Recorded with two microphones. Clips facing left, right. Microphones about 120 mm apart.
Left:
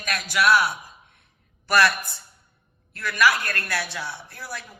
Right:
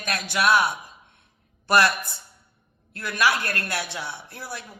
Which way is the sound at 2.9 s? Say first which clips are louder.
Left 2 dB; 25° right (ahead or behind).